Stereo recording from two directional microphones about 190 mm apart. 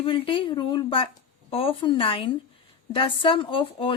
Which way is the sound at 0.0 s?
30° left (ahead or behind).